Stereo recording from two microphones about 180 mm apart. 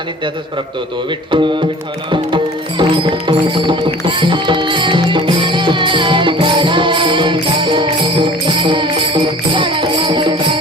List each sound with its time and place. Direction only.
1.3 s music: 25° right (ahead or behind)